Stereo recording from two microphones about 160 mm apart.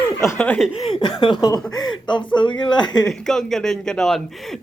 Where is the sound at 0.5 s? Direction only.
Centre (ahead or behind).